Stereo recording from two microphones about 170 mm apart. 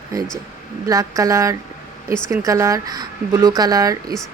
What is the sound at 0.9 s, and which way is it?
Speech, 20° right (ahead or behind).